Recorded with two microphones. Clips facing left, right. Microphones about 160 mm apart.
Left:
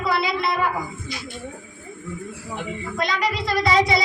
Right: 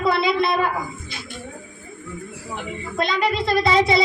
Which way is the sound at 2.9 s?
25° right (ahead or behind).